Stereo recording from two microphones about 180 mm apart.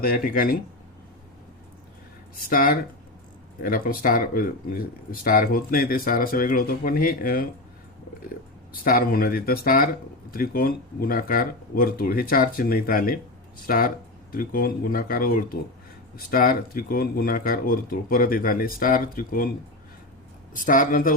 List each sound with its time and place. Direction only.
0.0 s speech: 50° left (ahead or behind)
2.4 s speech: 50° left (ahead or behind)
8.7 s speech: 55° left (ahead or behind)
20.5 s speech: 50° left (ahead or behind)